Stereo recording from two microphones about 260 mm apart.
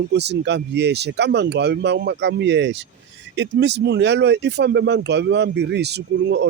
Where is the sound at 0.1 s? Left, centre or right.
Right.